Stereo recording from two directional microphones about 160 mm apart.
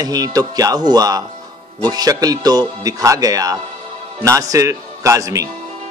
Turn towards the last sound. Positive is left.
turn(degrees=-20)  # may be behind; listen again after turning